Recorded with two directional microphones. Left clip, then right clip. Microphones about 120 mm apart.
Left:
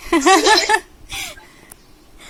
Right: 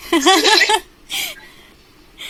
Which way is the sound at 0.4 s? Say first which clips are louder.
Right 1 dB; 15° right (ahead or behind).